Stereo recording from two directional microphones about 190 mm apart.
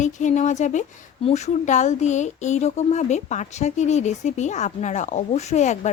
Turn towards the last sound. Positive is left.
turn(degrees=40)  # may be behind; listen again after turning